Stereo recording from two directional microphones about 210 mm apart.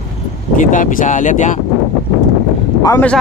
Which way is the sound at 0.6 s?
35° left (ahead or behind).